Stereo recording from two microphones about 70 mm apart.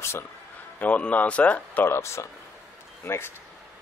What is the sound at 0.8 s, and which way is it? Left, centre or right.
Speech, centre.